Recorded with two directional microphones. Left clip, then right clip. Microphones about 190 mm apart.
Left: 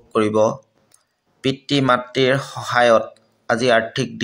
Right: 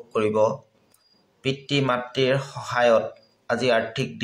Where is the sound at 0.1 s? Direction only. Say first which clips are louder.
Left 4 dB; 35° left (ahead or behind).